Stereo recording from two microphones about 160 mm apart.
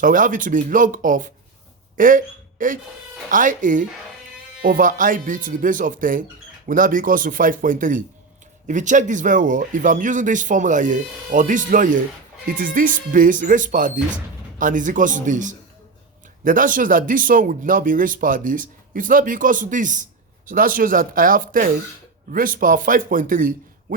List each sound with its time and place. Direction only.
0.0 s speech: 55° right (ahead or behind)